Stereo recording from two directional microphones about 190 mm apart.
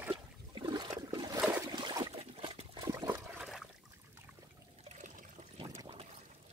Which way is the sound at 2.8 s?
15° right (ahead or behind).